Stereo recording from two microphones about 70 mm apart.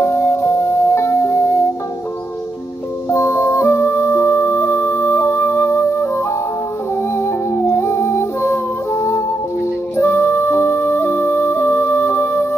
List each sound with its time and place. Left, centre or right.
0.0 s music: left
3.1 s music: left
4.3 s music: left
7.2 s music: left